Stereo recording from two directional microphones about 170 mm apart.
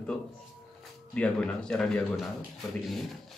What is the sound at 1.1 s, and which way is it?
Speech, 5° left (ahead or behind).